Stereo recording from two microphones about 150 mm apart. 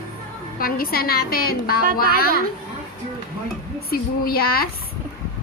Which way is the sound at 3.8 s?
85° left.